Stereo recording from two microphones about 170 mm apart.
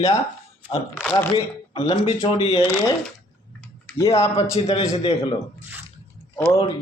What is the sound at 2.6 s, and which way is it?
Speech, 15° left (ahead or behind).